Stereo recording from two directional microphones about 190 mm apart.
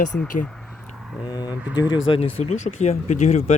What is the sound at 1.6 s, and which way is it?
Speech, 5° right (ahead or behind).